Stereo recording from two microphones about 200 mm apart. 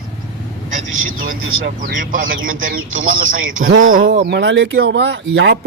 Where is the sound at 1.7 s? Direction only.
40° right (ahead or behind).